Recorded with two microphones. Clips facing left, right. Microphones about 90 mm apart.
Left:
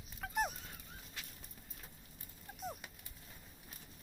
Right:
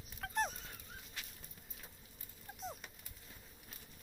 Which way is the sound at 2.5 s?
5° left (ahead or behind).